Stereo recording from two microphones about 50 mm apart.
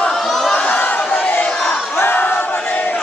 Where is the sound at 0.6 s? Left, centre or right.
Left.